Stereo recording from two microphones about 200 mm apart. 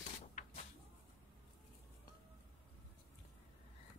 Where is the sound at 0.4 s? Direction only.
40° left (ahead or behind).